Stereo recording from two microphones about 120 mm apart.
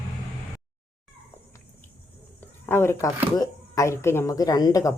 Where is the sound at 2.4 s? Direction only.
20° left (ahead or behind).